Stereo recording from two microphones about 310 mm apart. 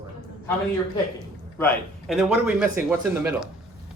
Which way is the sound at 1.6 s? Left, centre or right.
Centre.